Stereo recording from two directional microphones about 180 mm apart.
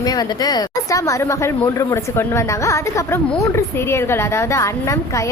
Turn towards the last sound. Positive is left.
turn(degrees=15)  # may be behind; listen again after turning